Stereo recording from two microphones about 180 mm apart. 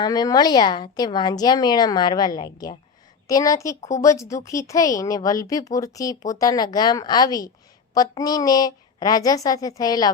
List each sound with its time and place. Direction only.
0.0 s speech: 20° left (ahead or behind)